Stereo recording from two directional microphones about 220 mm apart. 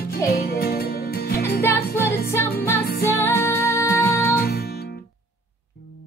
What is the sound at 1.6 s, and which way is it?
Music, 10° left (ahead or behind).